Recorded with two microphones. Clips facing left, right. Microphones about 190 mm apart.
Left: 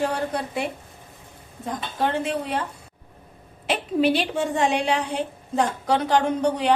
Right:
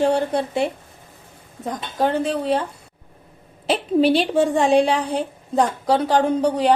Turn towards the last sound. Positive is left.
turn(degrees=-35)  # may be behind; listen again after turning